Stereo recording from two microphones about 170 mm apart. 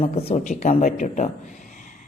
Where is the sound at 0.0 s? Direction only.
40° left (ahead or behind).